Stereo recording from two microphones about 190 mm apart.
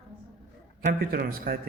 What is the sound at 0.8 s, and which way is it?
Speech, 50° right (ahead or behind).